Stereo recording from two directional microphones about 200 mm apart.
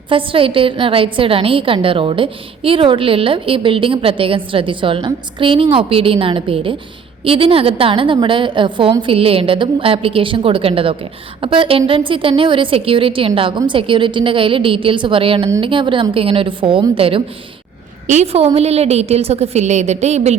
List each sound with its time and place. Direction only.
0.1 s a woman's voice: 25° right (ahead or behind)